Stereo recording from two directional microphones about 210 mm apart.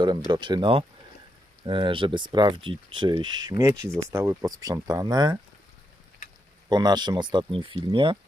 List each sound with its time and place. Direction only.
0.3 s speech: 20° right (ahead or behind)
6.7 s speech: 20° right (ahead or behind)